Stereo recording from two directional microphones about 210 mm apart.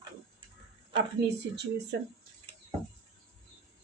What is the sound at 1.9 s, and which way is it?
Speech, 55° right (ahead or behind).